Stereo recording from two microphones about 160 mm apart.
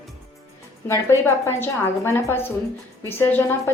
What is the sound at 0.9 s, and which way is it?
A woman's voice, 15° left (ahead or behind).